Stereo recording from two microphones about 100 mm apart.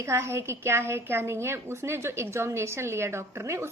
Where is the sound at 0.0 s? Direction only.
30° right (ahead or behind).